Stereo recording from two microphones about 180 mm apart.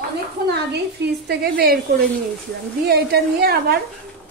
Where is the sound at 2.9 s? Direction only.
60° right (ahead or behind).